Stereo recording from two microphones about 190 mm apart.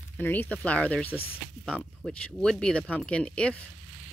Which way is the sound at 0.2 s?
10° left (ahead or behind).